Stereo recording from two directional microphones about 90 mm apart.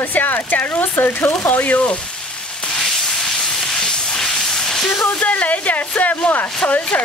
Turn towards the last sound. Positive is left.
turn(degrees=10)  # may be behind; listen again after turning